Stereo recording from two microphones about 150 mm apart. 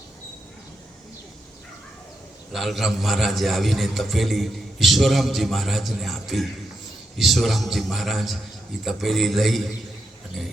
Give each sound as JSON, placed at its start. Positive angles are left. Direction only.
{"t": 2.5, "sound": "a man's voice", "side_deg": 0}